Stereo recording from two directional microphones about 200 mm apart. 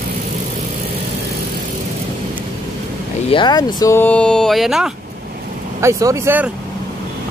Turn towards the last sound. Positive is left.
turn(degrees=-10)  # may be behind; listen again after turning